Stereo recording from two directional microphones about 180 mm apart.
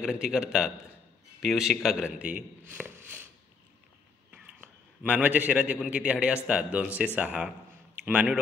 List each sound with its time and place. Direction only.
0.0 s a man's voice: 5° right (ahead or behind)
4.3 s a man's voice: 10° right (ahead or behind)